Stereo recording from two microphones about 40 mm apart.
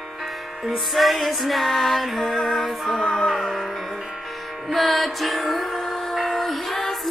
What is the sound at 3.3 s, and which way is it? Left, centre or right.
Music, centre.